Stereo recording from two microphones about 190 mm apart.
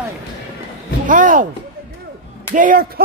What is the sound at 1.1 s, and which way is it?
Speech, 45° right (ahead or behind).